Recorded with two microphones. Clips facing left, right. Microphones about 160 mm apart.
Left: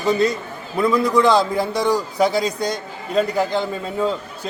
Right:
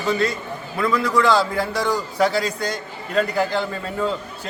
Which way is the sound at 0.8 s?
20° left (ahead or behind).